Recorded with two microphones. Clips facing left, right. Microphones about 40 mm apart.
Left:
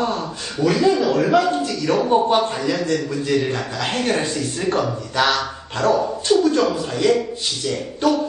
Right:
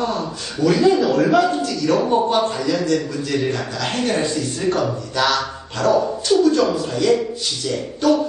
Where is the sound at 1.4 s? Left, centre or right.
Left.